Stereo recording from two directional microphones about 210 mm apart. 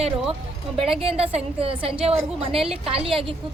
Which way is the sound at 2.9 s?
25° right (ahead or behind).